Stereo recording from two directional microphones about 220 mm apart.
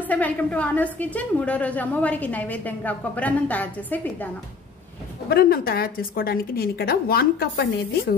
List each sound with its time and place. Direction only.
0.0 s a woman's voice: 5° left (ahead or behind)
5.3 s a woman's voice: 45° left (ahead or behind)